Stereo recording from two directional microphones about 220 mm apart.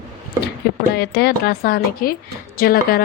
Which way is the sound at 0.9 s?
45° left (ahead or behind).